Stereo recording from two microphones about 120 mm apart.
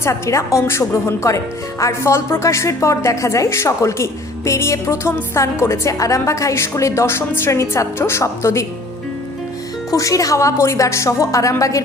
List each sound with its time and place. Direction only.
0.0 s a woman's voice: 25° left (ahead or behind)
9.9 s a woman's voice: 30° left (ahead or behind)